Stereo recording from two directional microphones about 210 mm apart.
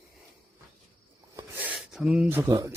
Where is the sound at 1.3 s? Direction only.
10° right (ahead or behind).